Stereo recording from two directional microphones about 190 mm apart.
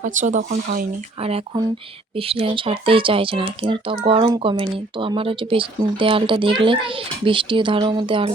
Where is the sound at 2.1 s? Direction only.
30° right (ahead or behind).